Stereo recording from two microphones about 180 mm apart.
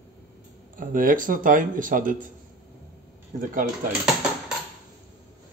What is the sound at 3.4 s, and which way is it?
Speech, 50° right (ahead or behind).